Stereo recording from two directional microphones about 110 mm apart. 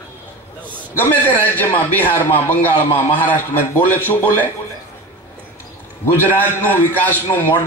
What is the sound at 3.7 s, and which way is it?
Speech, 20° left (ahead or behind).